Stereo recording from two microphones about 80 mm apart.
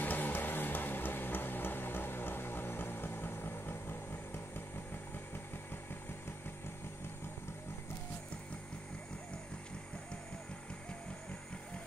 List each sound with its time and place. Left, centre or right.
0.0 s music: left